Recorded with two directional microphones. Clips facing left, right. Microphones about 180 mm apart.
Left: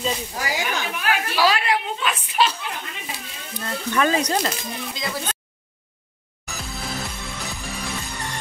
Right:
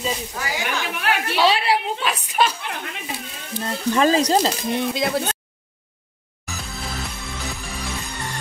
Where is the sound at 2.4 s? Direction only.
50° right (ahead or behind).